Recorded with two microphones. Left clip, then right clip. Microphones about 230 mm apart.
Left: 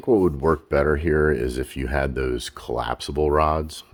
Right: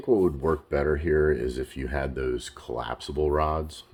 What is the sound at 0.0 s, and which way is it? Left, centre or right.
Speech, left.